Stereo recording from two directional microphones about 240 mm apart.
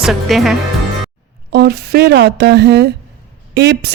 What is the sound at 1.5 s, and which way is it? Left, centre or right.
A woman's voice, right.